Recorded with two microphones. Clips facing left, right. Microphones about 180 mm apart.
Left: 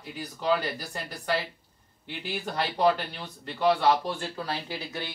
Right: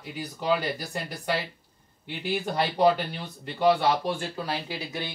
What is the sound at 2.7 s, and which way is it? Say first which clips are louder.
Speech: right 2 dB; 15° right (ahead or behind).